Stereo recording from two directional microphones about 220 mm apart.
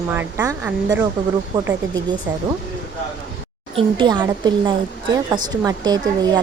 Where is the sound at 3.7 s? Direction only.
20° right (ahead or behind).